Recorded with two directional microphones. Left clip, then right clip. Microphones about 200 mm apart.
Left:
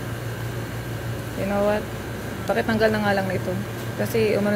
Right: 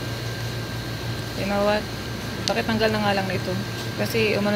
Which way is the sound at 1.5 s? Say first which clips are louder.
Even; 10° left (ahead or behind).